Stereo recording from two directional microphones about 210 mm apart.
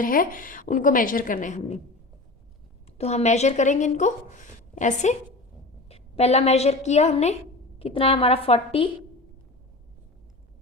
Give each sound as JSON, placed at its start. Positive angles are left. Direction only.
{"t": 0.0, "sound": "a woman's voice", "side_deg": 40}
{"t": 3.0, "sound": "a woman's voice", "side_deg": 30}